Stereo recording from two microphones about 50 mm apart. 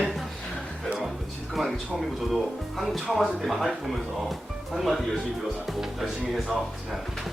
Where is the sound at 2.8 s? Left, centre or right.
Centre.